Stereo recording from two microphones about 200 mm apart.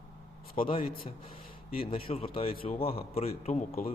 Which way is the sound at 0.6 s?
25° left (ahead or behind).